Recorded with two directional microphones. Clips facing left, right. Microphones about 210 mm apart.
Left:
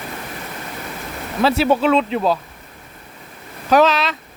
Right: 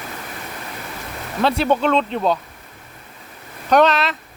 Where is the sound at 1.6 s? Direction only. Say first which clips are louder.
Left 2 dB; 5° left (ahead or behind).